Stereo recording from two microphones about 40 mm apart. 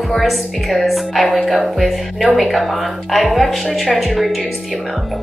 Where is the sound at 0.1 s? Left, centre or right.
Centre.